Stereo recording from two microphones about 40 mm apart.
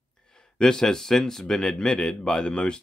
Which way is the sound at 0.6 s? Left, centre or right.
Centre.